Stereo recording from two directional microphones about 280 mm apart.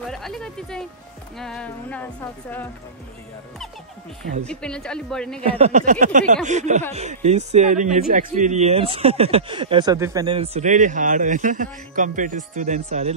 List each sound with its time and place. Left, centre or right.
0.0 s a woman's voice: centre
4.5 s a woman's voice: centre
5.4 s speech: right